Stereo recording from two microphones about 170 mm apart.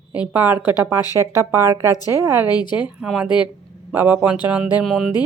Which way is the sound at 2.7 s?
5° right (ahead or behind).